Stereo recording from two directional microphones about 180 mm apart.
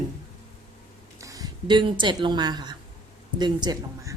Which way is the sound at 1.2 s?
20° right (ahead or behind).